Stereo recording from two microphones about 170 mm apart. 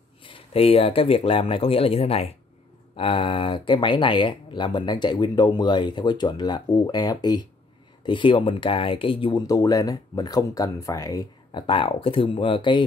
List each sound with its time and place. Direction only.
0.2 s speech: 35° left (ahead or behind)